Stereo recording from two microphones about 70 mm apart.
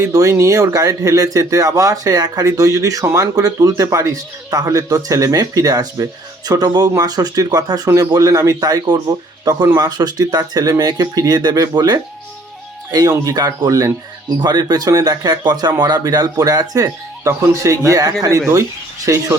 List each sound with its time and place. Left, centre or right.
0.0 s speech: right
7.9 s speech: right
14.3 s speech: right